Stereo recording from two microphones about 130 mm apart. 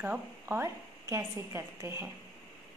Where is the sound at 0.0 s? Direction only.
15° right (ahead or behind).